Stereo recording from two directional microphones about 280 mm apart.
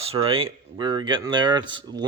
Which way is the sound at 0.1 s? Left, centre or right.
Centre.